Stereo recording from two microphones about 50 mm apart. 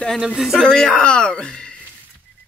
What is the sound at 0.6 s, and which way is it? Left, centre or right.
Speech, centre.